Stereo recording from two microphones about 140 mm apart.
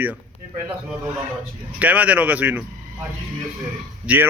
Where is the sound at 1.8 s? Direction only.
10° right (ahead or behind).